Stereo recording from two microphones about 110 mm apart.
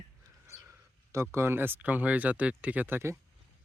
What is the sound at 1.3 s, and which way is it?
Speech, 20° right (ahead or behind).